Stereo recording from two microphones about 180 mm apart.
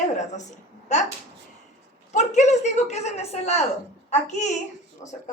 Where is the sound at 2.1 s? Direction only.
40° left (ahead or behind).